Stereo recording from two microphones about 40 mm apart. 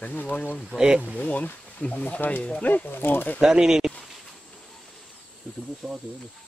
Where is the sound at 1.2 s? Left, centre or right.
Left.